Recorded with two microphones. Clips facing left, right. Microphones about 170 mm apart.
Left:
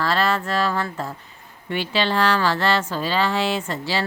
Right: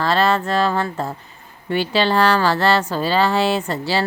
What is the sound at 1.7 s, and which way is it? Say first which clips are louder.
Speech: right 4 dB; 40° right (ahead or behind).